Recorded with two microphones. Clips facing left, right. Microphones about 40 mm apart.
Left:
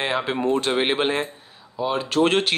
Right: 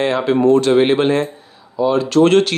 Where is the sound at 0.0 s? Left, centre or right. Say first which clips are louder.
Right 8 dB; centre.